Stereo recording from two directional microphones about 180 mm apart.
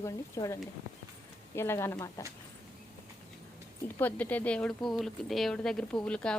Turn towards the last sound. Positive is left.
turn(degrees=5)  # may be behind; listen again after turning